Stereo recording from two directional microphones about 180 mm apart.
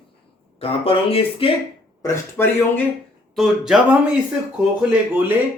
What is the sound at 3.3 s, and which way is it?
Speech, centre (ahead or behind).